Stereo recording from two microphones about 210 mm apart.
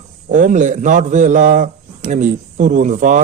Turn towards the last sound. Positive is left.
turn(degrees=-35)  # may be behind; listen again after turning